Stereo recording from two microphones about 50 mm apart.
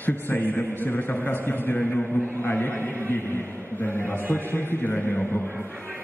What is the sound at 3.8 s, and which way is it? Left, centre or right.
A man's voice, left.